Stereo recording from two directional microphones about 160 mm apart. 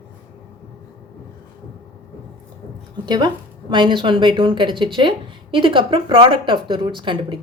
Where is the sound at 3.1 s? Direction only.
25° right (ahead or behind).